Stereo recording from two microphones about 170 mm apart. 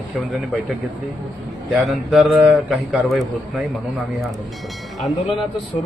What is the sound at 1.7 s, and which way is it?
A man's voice, centre (ahead or behind).